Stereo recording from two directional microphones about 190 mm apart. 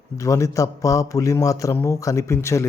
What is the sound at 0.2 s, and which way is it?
Speech, 15° left (ahead or behind).